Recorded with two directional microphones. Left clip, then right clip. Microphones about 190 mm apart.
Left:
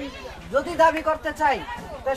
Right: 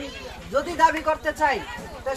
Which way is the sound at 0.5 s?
10° left (ahead or behind).